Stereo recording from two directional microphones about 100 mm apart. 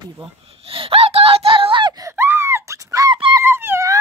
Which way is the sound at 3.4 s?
25° right (ahead or behind).